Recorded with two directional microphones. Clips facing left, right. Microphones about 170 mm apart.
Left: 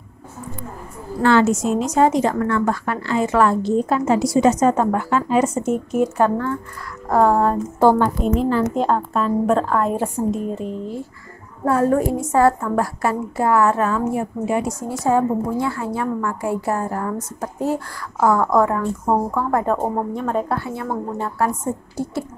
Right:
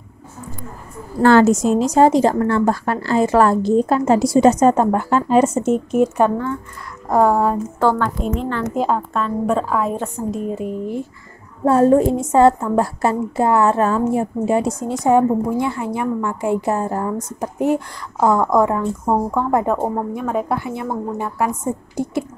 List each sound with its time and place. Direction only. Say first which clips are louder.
1.2 s a woman's voice: right 4 dB; 40° right (ahead or behind); by 7.6 s 10° right (ahead or behind)
7.8 s a woman's voice: left 3 dB; 15° left (ahead or behind)
8.2 s a woman's voice: left 4 dB; 5° left (ahead or behind)
9.9 s a woman's voice: left 2 dB; 10° left (ahead or behind)
10.5 s a woman's voice: right 3 dB; 10° right (ahead or behind)
11.6 s a woman's voice: right 4 dB; 25° right (ahead or behind)